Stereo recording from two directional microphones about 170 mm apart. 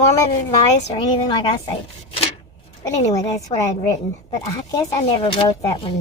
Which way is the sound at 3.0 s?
20° left (ahead or behind).